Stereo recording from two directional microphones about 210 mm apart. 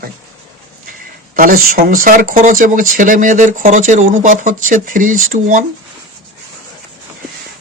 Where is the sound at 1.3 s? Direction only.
45° right (ahead or behind).